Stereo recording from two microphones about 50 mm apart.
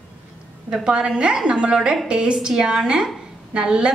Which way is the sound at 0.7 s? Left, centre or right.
Centre.